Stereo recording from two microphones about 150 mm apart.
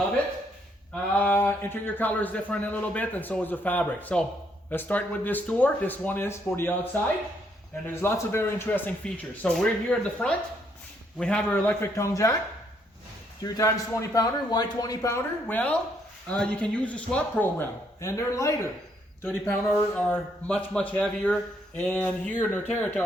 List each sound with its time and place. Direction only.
1.2 s a man's voice: 15° left (ahead or behind)
8.0 s a man's voice: 15° left (ahead or behind)
13.4 s a man's voice: 20° left (ahead or behind)